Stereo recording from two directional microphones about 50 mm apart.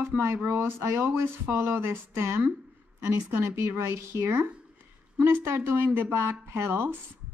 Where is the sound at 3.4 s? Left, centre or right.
Right.